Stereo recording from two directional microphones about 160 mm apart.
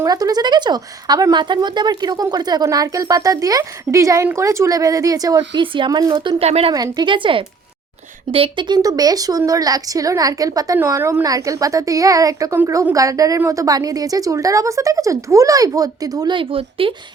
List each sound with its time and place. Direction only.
0.0 s a woman's voice: 25° right (ahead or behind)
6.4 s speech: 40° right (ahead or behind)
6.7 s a woman's voice: 25° right (ahead or behind)